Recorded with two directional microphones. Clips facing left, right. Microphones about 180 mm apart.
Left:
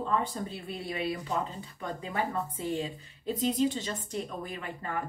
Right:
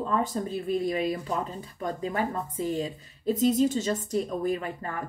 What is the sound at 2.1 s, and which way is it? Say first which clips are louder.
Speech: right 3 dB; 45° right (ahead or behind).